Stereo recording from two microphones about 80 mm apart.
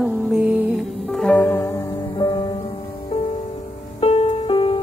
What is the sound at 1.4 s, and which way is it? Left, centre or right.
Music, left.